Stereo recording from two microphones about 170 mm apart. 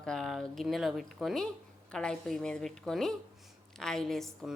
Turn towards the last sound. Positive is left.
turn(degrees=0)  # may be behind; listen again after turning